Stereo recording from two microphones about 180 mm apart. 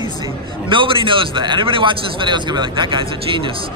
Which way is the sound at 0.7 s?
30° right (ahead or behind).